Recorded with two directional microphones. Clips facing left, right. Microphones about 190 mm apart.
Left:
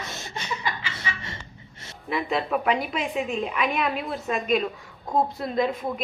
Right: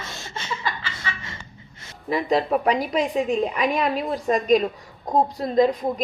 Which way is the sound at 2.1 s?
40° right (ahead or behind).